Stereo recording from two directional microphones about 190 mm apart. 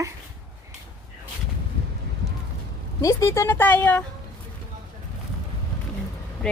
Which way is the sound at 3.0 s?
15° left (ahead or behind).